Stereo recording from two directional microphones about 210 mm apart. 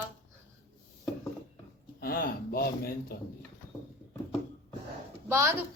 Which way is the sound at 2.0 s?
45° left (ahead or behind).